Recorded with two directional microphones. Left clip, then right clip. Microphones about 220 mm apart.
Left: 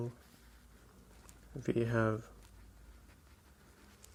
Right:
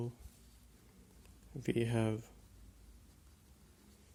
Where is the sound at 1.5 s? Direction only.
30° right (ahead or behind).